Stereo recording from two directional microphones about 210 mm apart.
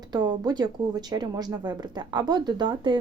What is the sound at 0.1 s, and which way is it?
A woman's voice, 20° right (ahead or behind).